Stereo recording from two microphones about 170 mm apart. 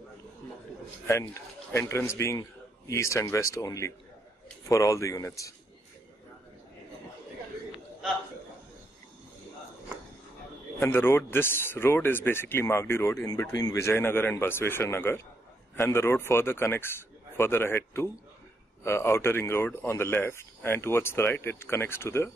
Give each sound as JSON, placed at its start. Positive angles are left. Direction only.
{"t": 1.7, "sound": "speech", "side_deg": 15}
{"t": 10.8, "sound": "speech", "side_deg": 15}